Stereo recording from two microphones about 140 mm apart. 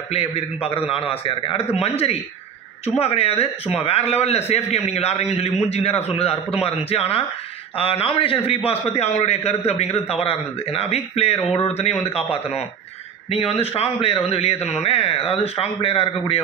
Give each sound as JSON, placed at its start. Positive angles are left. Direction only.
{"t": 0.1, "sound": "a man's voice", "side_deg": 45}